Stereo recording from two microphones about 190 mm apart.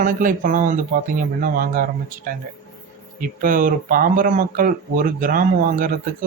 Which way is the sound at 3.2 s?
45° right (ahead or behind).